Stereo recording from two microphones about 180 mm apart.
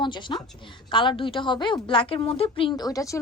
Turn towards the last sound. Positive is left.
turn(degrees=20)  # may be behind; listen again after turning